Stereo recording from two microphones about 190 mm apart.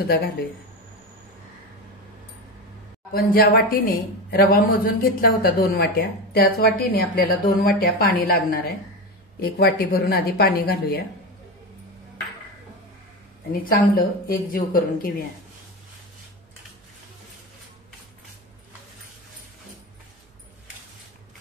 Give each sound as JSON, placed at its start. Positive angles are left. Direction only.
{"t": 3.1, "sound": "a woman's voice", "side_deg": 50}
{"t": 13.7, "sound": "a woman's voice", "side_deg": 50}